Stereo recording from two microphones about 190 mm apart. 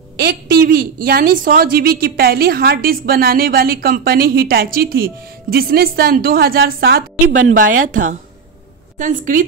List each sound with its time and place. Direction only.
0.2 s a woman's voice: 55° right (ahead or behind)
7.4 s a woman's voice: 45° right (ahead or behind)